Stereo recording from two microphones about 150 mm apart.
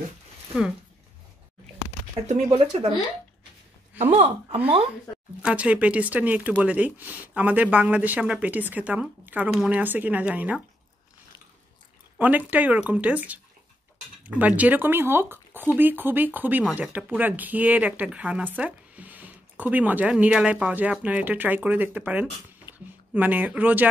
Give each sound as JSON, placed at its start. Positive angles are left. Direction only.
{"t": 2.5, "sound": "speech", "side_deg": -45}
{"t": 4.0, "sound": "speech", "side_deg": -40}
{"t": 5.4, "sound": "speech", "side_deg": -10}
{"t": 12.2, "sound": "speech", "side_deg": -10}
{"t": 22.7, "sound": "a sound", "side_deg": 30}
{"t": 23.1, "sound": "speech", "side_deg": -10}